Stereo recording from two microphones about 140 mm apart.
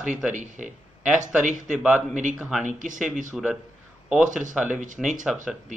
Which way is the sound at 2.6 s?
65° right (ahead or behind).